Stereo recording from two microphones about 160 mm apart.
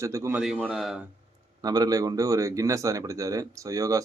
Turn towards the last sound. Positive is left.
turn(degrees=-20)  # may be behind; listen again after turning